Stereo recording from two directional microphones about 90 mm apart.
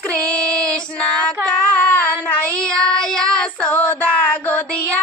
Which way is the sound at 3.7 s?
20° left (ahead or behind).